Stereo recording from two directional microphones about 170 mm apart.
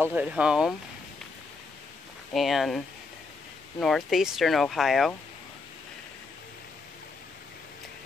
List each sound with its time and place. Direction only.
0.0 s speech: 10° right (ahead or behind)
2.3 s speech: centre (ahead or behind)
3.8 s speech: centre (ahead or behind)